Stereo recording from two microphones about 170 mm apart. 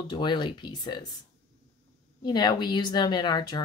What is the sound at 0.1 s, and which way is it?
Speech, 25° left (ahead or behind).